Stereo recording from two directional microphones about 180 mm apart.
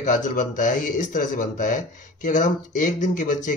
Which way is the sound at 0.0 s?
45° left (ahead or behind).